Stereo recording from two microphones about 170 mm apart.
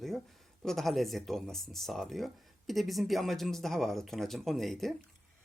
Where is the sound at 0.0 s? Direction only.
Centre (ahead or behind).